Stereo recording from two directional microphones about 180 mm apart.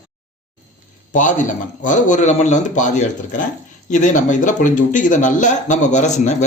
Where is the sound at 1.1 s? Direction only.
45° left (ahead or behind).